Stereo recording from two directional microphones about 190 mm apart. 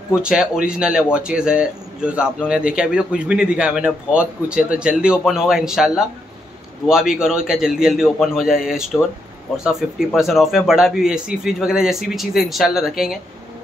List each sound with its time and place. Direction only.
0.1 s a man's voice: 5° right (ahead or behind)